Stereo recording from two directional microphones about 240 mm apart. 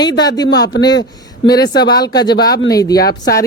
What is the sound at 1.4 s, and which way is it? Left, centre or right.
Speech, centre.